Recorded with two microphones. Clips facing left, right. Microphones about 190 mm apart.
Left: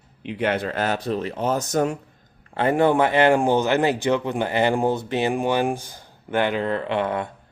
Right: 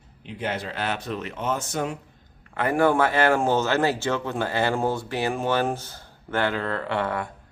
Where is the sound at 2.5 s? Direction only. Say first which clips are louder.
Left 2 dB; 25° left (ahead or behind).